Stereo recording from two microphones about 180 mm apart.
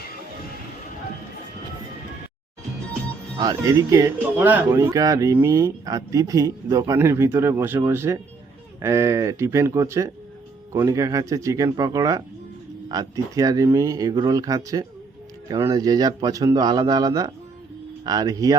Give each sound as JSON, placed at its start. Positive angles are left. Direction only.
{"t": 3.3, "sound": "speech", "side_deg": -20}